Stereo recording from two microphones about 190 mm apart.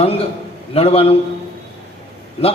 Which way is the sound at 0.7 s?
30° left (ahead or behind).